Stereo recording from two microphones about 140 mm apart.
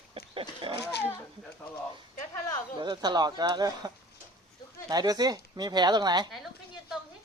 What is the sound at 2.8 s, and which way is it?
Speech, 30° right (ahead or behind).